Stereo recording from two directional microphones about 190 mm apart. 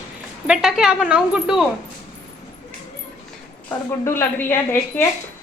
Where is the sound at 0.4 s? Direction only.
5° right (ahead or behind).